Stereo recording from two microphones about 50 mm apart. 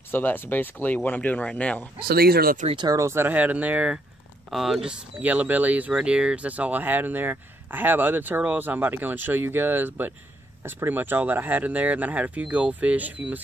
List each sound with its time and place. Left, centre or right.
0.1 s speech: left
3.0 s speech: right
3.3 s speech: right
4.5 s speech: centre
5.2 s speech: right
5.9 s speech: centre